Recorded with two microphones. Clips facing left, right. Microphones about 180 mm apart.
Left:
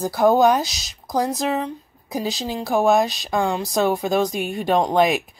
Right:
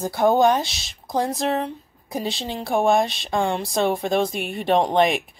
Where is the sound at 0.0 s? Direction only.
Centre (ahead or behind).